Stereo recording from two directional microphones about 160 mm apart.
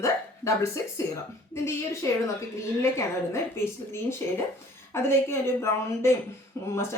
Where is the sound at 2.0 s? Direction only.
20° left (ahead or behind).